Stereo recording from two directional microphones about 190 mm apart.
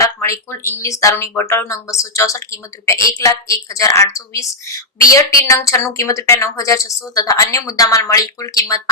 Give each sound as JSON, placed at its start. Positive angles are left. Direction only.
{"t": 0.0, "sound": "a woman's voice", "side_deg": 15}